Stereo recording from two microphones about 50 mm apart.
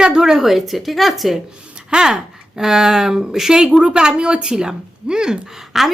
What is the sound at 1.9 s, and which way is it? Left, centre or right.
Speech, centre.